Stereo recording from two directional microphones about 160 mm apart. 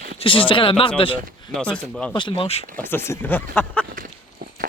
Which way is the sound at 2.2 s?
30° left (ahead or behind).